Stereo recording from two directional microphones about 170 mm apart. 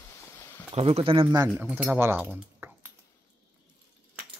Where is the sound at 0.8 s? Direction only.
35° right (ahead or behind).